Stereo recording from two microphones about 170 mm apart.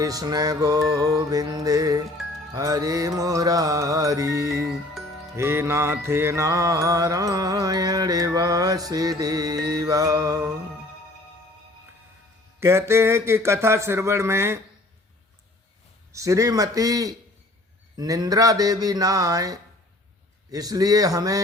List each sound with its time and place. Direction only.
0.0 s music: 20° right (ahead or behind)
12.5 s speech: 15° right (ahead or behind)
16.1 s music: 20° right (ahead or behind)